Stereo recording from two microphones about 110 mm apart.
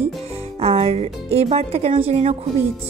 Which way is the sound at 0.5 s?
65° right (ahead or behind).